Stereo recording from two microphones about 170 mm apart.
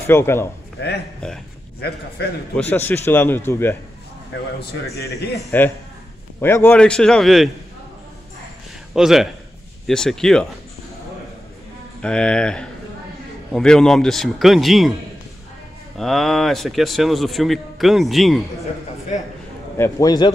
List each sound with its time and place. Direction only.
0.0 s speech: 15° left (ahead or behind)
0.7 s speech: 75° left (ahead or behind)
2.2 s a man's voice: 70° left (ahead or behind)
2.5 s speech: 10° left (ahead or behind)
5.5 s speech: 10° left (ahead or behind)
8.9 s speech: centre (ahead or behind)
12.0 s speech: 5° left (ahead or behind)
16.0 s speech: centre (ahead or behind)
19.8 s a man's voice: 20° left (ahead or behind)